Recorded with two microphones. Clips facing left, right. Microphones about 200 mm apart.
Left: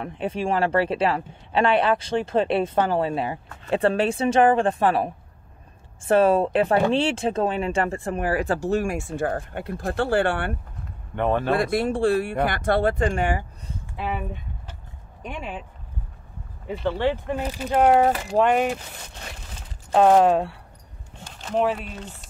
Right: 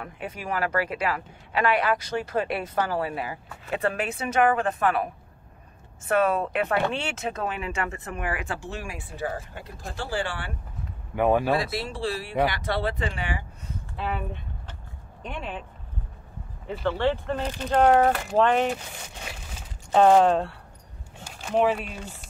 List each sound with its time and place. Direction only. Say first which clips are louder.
0.0 s speech: left 8 dB; 30° left (ahead or behind); by 10.5 s 55° left (ahead or behind)
11.1 s speech: right 1 dB; 10° right (ahead or behind)
11.5 s speech: left 5 dB; 55° left (ahead or behind)
13.9 s a sound: left 2 dB; 10° left (ahead or behind)
15.2 s speech: left 1 dB; 10° left (ahead or behind)
16.7 s speech: left 1 dB; 5° left (ahead or behind)
19.9 s speech: left 1 dB; 5° left (ahead or behind)
21.4 s speech: even; 10° right (ahead or behind)